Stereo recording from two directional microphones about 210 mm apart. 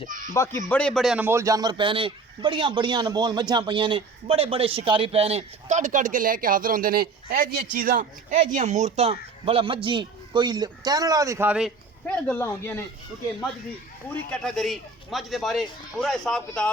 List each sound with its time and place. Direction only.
0.1 s speech: 40° right (ahead or behind)
0.3 s a man's voice: 15° left (ahead or behind); by 11.7 s 5° right (ahead or behind)
12.0 s speech: 10° left (ahead or behind)
14.1 s speech: 5° left (ahead or behind)